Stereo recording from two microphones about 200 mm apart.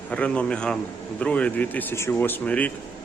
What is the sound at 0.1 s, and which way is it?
A man's voice, 5° left (ahead or behind).